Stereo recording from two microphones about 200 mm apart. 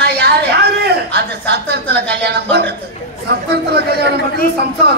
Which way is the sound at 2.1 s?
55° right (ahead or behind).